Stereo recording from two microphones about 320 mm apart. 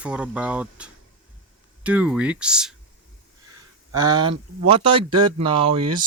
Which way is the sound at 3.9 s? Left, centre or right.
Centre.